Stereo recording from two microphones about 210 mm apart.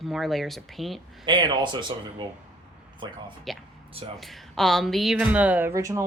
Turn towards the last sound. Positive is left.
turn(degrees=-15)  # may be behind; listen again after turning